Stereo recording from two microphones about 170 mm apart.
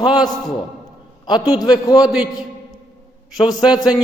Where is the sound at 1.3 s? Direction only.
25° left (ahead or behind).